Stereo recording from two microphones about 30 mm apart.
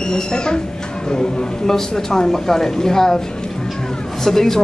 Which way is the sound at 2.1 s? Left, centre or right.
Centre.